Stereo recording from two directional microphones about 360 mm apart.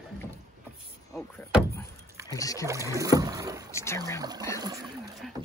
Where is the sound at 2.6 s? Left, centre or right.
Centre.